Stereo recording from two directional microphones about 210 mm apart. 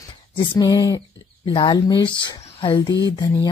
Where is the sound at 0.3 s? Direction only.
20° left (ahead or behind).